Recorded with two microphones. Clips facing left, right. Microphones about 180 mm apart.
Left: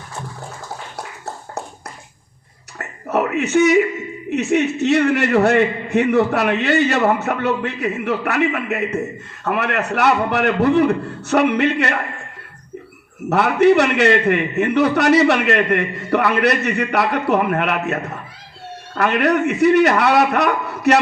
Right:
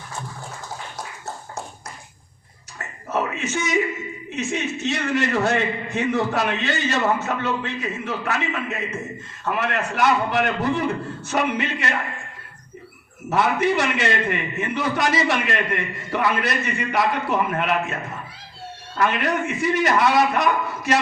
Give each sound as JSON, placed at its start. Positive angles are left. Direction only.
{"t": 2.7, "sound": "a man's voice", "side_deg": 65}
{"t": 13.3, "sound": "a man's voice", "side_deg": 65}